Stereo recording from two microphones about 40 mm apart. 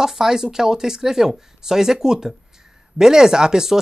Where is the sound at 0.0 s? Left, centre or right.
Centre.